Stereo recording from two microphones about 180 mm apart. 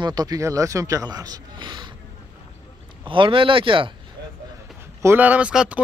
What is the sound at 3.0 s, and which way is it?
Speech, 25° right (ahead or behind).